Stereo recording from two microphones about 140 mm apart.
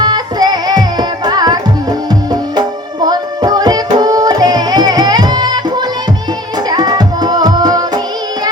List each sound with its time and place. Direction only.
0.0 s music: 30° right (ahead or behind)